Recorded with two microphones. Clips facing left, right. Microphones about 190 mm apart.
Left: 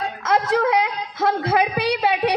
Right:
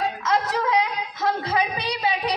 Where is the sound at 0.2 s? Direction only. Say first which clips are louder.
Left 8 dB; 55° left (ahead or behind).